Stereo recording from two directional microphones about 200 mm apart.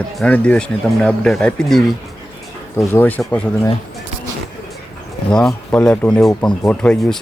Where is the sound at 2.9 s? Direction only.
10° left (ahead or behind).